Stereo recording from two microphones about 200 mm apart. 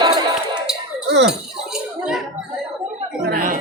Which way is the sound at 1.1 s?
60° right (ahead or behind).